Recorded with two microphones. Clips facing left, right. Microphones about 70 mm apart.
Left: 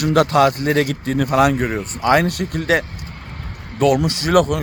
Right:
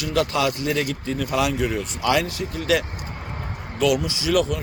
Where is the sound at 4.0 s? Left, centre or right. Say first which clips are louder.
Left 6 dB; left.